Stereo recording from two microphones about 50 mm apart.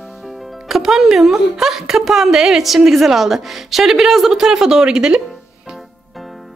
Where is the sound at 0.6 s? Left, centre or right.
Centre.